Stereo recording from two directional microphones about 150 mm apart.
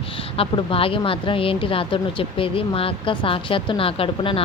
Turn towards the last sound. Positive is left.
turn(degrees=35)  # may be behind; listen again after turning